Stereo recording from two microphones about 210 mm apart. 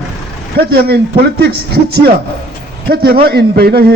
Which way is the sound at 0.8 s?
50° right (ahead or behind).